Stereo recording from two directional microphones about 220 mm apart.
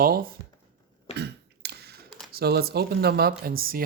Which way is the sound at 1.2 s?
50° right (ahead or behind).